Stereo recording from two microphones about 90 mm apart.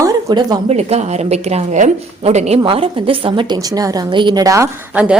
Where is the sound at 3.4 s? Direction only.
45° right (ahead or behind).